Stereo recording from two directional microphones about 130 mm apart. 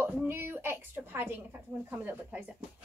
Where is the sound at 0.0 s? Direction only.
20° right (ahead or behind).